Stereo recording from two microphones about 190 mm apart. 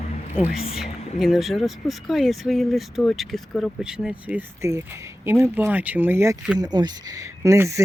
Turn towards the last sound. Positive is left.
turn(degrees=-15)  # may be behind; listen again after turning